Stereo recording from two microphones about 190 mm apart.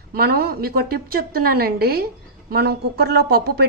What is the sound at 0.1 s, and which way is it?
A woman's voice, 55° right (ahead or behind).